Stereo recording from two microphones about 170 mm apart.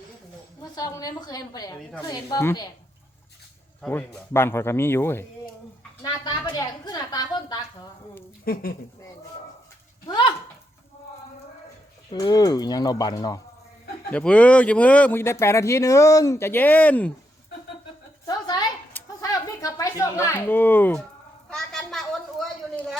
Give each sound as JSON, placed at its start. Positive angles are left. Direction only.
{"t": 0.6, "sound": "speech", "side_deg": 20}
{"t": 3.8, "sound": "speech", "side_deg": 5}
{"t": 6.0, "sound": "a woman's voice", "side_deg": 25}
{"t": 8.5, "sound": "speech", "side_deg": 60}
{"t": 10.1, "sound": "a sound", "side_deg": 30}
{"t": 12.1, "sound": "speech", "side_deg": 20}
{"t": 14.1, "sound": "speech", "side_deg": 5}
{"t": 18.3, "sound": "a sound", "side_deg": 25}